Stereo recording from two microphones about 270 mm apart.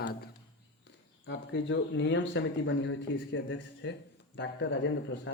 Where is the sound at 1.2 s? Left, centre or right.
Left.